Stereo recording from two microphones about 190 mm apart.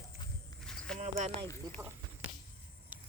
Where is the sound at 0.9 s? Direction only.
40° right (ahead or behind).